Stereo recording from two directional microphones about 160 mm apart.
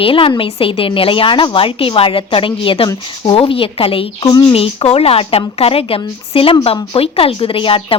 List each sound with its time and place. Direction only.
0.0 s a woman's voice: 35° left (ahead or behind)
4.5 s a woman's voice: 35° left (ahead or behind)